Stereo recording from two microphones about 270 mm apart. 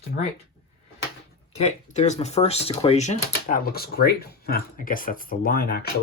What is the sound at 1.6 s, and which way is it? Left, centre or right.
Speech, left.